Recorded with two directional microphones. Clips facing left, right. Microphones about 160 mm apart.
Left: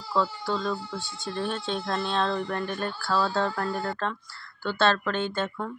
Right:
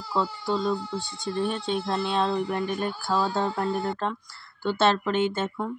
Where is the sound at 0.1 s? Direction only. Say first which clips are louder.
Even; 20° right (ahead or behind).